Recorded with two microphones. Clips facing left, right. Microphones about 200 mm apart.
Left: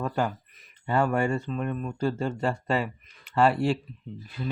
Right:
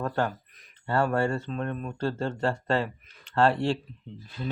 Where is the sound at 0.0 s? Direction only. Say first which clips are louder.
Even; 10° left (ahead or behind).